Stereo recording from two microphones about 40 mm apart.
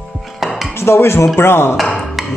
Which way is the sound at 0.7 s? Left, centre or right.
Left.